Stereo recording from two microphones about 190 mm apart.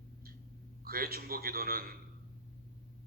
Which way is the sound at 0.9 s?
55° right (ahead or behind).